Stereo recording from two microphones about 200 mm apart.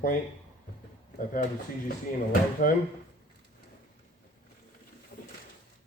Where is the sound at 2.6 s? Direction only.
45° left (ahead or behind).